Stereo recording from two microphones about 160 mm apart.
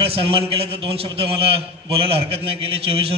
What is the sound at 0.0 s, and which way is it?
A man's voice, 35° right (ahead or behind).